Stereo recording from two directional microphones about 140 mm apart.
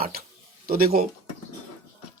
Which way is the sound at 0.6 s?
90° right.